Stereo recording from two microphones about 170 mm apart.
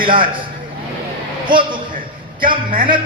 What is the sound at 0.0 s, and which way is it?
Speech, 55° right (ahead or behind).